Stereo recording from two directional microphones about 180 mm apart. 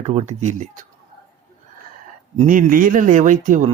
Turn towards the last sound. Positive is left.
turn(degrees=-45)  # may be behind; listen again after turning